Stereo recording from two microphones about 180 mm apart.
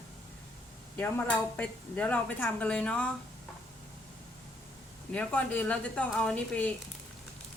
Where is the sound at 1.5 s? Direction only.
10° left (ahead or behind).